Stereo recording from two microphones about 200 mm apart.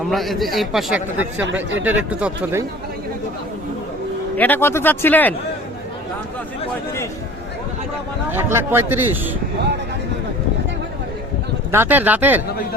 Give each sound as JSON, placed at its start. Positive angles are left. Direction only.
{"t": 0.1, "sound": "a man's voice", "side_deg": 0}
{"t": 4.4, "sound": "speech", "side_deg": 10}
{"t": 8.3, "sound": "a man's voice", "side_deg": -10}
{"t": 11.7, "sound": "a man's voice", "side_deg": -10}